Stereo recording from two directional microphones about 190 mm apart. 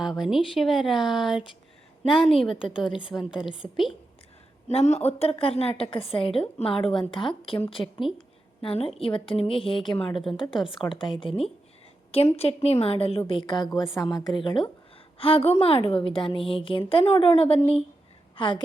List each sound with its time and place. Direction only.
0.0 s speech: centre (ahead or behind)
2.5 s a woman's voice: 25° left (ahead or behind)
3.1 s speech: 5° right (ahead or behind)
4.7 s a woman's voice: 35° left (ahead or behind)
10.5 s speech: centre (ahead or behind)
11.0 s a woman's voice: 25° left (ahead or behind)